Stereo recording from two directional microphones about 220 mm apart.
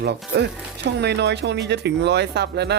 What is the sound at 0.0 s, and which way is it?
Speech, 50° right (ahead or behind).